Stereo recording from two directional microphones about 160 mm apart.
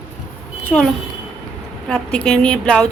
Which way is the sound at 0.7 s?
Centre (ahead or behind).